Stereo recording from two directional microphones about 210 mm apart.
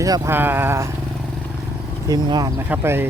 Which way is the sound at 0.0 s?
15° right (ahead or behind).